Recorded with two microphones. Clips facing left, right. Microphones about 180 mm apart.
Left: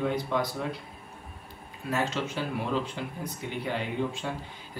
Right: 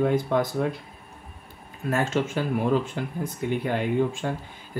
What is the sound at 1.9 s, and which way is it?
Speech, 50° right (ahead or behind).